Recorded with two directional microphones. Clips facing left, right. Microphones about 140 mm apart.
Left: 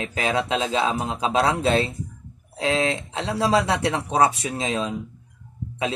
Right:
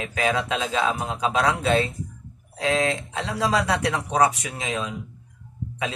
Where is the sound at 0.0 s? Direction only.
30° left (ahead or behind).